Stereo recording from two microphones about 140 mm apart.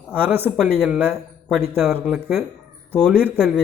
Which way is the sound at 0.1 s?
15° right (ahead or behind).